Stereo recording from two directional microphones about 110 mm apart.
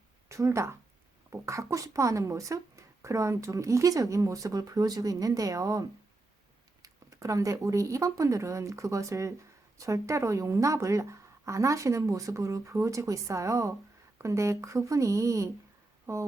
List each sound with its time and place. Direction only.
0.3 s speech: 25° right (ahead or behind)
6.8 s speech: 30° right (ahead or behind)